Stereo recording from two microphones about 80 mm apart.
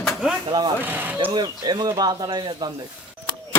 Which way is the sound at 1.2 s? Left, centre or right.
Right.